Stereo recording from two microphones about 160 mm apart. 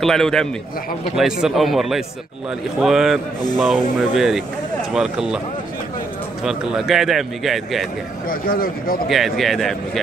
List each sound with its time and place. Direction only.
0.0 s a man's voice: 5° left (ahead or behind)
6.4 s a man's voice: 5° right (ahead or behind)
8.3 s speech: 65° left (ahead or behind)
9.1 s a man's voice: centre (ahead or behind)